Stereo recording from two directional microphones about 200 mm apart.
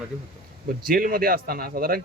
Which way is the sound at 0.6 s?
45° right (ahead or behind).